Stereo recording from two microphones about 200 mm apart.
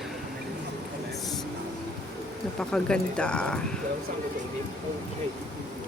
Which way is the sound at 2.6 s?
5° left (ahead or behind).